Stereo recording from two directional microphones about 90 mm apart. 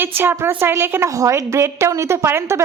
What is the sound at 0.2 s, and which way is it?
A woman's voice, 25° right (ahead or behind).